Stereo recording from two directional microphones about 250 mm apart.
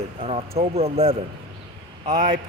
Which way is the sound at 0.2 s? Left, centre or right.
Right.